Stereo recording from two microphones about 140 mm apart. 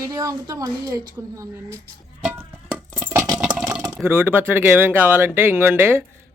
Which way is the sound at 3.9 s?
15° right (ahead or behind).